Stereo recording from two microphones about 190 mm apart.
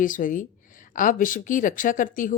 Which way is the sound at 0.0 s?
45° left (ahead or behind).